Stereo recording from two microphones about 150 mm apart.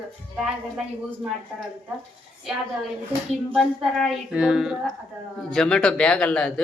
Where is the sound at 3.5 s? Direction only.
Centre (ahead or behind).